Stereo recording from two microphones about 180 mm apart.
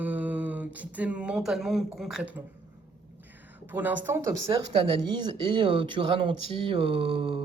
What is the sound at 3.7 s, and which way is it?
Speech, 10° right (ahead or behind).